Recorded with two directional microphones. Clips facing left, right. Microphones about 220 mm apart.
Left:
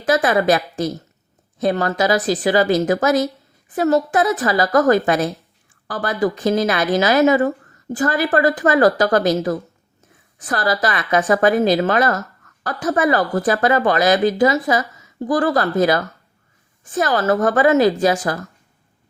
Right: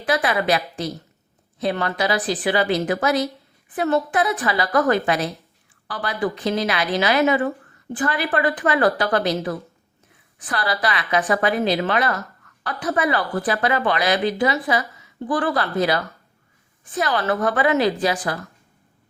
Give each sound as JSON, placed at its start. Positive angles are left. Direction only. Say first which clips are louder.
{"t": 0.0, "sound": "a woman's voice", "louder": "left 5 dB", "side_deg": 45}